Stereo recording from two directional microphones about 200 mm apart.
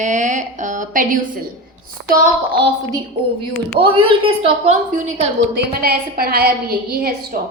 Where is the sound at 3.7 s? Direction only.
25° right (ahead or behind).